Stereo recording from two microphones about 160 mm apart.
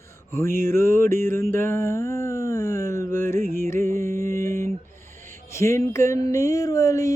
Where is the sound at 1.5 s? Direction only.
15° left (ahead or behind).